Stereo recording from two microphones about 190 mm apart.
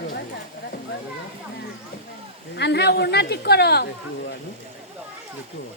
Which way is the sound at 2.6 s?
60° left (ahead or behind).